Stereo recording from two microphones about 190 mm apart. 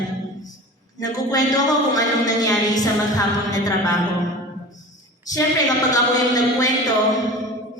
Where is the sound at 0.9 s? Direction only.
20° left (ahead or behind).